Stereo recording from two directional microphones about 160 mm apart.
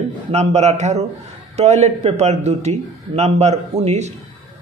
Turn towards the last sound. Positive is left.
turn(degrees=-45)  # may be behind; listen again after turning